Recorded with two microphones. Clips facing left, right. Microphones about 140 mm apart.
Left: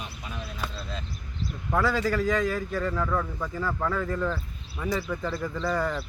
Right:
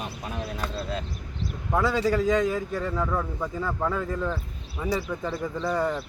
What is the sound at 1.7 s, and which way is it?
A man's voice, 20° right (ahead or behind).